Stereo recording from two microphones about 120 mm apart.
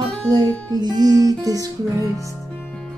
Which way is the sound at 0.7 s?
35° right (ahead or behind).